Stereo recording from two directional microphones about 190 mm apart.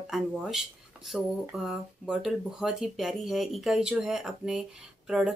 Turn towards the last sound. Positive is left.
turn(degrees=-5)  # may be behind; listen again after turning